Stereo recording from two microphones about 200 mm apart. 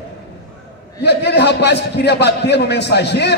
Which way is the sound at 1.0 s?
55° left (ahead or behind).